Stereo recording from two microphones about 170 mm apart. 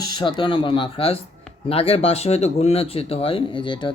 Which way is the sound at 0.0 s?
25° left (ahead or behind).